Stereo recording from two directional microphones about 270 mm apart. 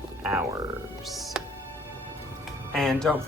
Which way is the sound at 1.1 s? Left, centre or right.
Centre.